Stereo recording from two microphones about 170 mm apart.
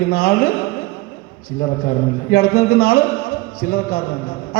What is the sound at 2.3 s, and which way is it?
Speech, 60° left (ahead or behind).